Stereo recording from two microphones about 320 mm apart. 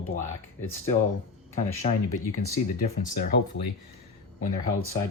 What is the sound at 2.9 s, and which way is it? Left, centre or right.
Speech, left.